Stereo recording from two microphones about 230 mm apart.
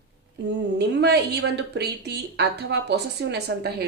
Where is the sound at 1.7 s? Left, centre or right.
Right.